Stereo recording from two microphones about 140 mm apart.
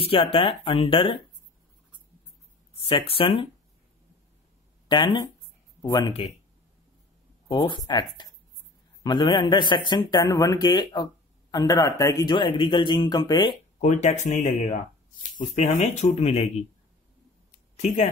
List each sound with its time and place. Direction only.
0.0 s speech: 40° left (ahead or behind)
2.8 s speech: 40° left (ahead or behind)
4.8 s speech: 35° left (ahead or behind)
7.4 s speech: 35° left (ahead or behind)
12.4 s speech: 35° left (ahead or behind)
13.7 s speech: 55° left (ahead or behind)
15.8 s speech: 55° left (ahead or behind)